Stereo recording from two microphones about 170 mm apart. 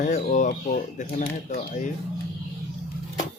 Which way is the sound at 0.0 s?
45° left (ahead or behind).